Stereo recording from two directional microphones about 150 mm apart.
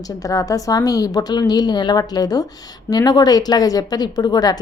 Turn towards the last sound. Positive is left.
turn(degrees=25)  # may be behind; listen again after turning